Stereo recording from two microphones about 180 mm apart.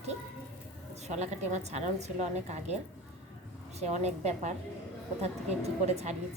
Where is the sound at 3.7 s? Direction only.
40° right (ahead or behind).